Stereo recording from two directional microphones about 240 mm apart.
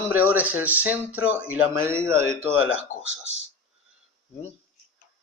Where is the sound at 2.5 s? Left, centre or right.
Left.